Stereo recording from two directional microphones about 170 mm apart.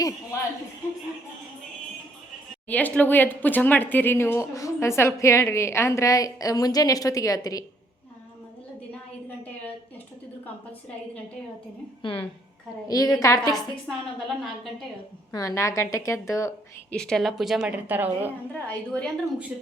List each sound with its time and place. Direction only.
0.3 s speech: 15° left (ahead or behind)
2.6 s speech: 10° left (ahead or behind)
10.4 s a sound: 10° left (ahead or behind)
12.0 s a woman's voice: 30° left (ahead or behind)
13.8 s a woman's voice: centre (ahead or behind)
15.3 s speech: 20° left (ahead or behind)
16.9 s a woman's voice: 5° left (ahead or behind)
18.5 s a woman's voice: 5° left (ahead or behind)